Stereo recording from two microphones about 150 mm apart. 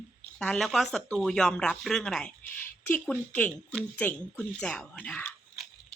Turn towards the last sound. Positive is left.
turn(degrees=5)  # may be behind; listen again after turning